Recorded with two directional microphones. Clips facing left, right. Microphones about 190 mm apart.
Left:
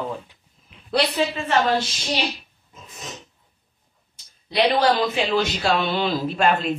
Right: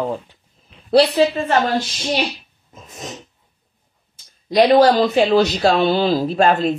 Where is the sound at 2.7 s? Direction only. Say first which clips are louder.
Right 5 dB; 45° right (ahead or behind).